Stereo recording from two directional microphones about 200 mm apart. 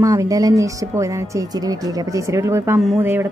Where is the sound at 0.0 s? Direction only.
15° right (ahead or behind).